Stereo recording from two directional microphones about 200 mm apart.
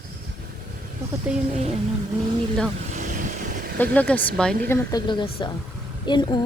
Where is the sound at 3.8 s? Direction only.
10° left (ahead or behind).